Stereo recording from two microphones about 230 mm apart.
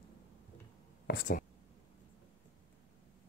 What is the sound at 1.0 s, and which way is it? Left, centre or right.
Speech, left.